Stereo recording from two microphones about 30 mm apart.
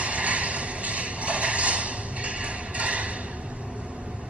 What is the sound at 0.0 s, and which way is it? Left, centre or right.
Music, right.